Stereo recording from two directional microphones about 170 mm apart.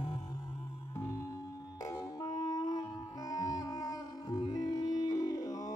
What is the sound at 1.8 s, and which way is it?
Music, 20° left (ahead or behind).